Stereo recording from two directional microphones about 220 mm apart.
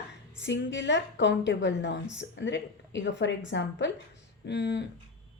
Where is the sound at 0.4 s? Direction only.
55° left (ahead or behind).